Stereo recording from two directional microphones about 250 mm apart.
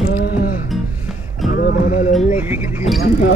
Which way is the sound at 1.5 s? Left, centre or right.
Left.